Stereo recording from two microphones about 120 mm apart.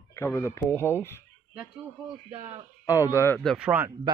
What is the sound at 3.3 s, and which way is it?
Speech, 5° right (ahead or behind).